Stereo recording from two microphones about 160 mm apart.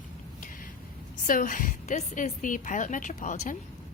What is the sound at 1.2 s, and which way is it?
A woman's voice, 55° left (ahead or behind).